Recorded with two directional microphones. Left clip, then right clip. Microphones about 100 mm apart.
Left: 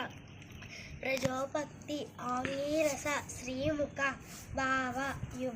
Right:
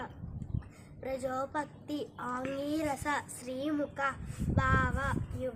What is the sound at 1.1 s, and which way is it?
A woman's voice, 45° right (ahead or behind).